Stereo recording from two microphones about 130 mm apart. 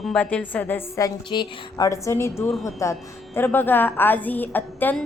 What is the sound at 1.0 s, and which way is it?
A woman's voice, 30° left (ahead or behind).